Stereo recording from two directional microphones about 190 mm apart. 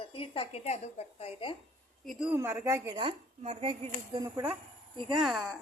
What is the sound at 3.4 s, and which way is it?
A woman's voice, 30° right (ahead or behind).